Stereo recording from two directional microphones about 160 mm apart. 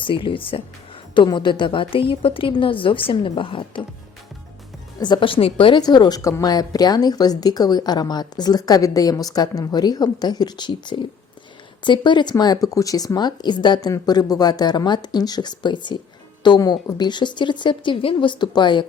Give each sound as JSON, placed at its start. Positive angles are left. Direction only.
{"t": 0.0, "sound": "a woman's voice", "side_deg": 30}
{"t": 4.9, "sound": "a woman's voice", "side_deg": 25}